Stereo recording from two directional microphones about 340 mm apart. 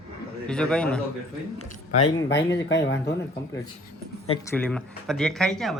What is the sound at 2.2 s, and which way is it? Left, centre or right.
Speech, left.